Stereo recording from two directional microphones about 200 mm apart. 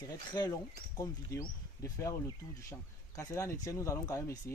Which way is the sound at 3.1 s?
15° left (ahead or behind).